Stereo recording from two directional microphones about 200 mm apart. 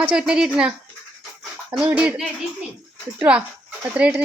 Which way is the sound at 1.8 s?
5° right (ahead or behind).